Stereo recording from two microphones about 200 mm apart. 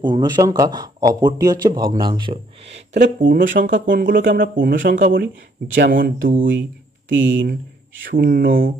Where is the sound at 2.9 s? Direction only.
40° right (ahead or behind).